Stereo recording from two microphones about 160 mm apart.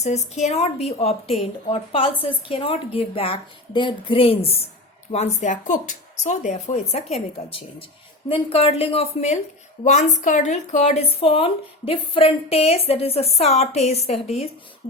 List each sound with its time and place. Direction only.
0.0 s a woman's voice: 45° left (ahead or behind)
8.3 s a woman's voice: 35° left (ahead or behind)